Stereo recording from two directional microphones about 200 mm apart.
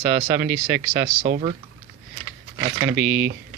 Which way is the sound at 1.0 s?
50° right (ahead or behind).